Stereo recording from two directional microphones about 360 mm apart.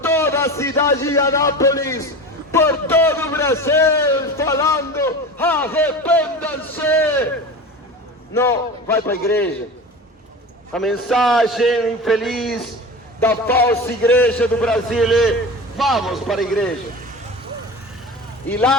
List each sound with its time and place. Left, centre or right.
0.0 s a man's voice: centre
8.3 s a man's voice: centre
10.7 s a man's voice: centre
18.4 s a man's voice: centre